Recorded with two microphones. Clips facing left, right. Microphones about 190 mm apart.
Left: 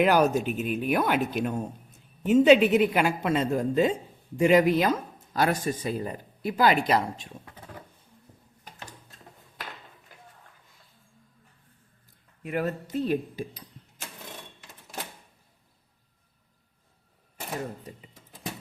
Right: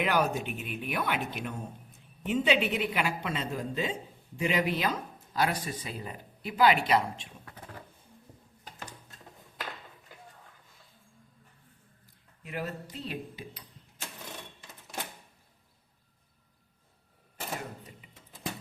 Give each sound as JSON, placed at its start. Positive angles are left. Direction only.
{"t": 0.0, "sound": "speech", "side_deg": 40}
{"t": 12.4, "sound": "speech", "side_deg": 55}
{"t": 17.9, "sound": "speech", "side_deg": 35}